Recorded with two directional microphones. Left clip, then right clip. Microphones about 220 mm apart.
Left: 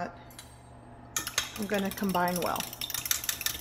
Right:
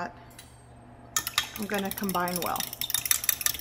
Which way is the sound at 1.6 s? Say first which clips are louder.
Even; centre (ahead or behind).